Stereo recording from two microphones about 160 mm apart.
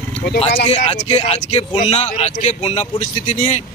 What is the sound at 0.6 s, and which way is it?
Speech, 40° left (ahead or behind).